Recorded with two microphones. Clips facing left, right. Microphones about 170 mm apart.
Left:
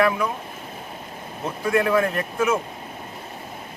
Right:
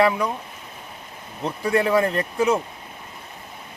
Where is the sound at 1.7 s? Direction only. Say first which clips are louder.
Right 1 dB; 30° right (ahead or behind).